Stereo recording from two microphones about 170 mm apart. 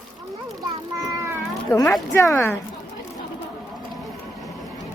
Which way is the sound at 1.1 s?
20° right (ahead or behind).